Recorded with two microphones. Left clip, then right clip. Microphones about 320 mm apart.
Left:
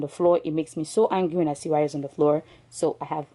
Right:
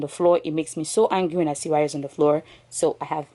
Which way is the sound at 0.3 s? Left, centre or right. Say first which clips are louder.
Right 1 dB; centre.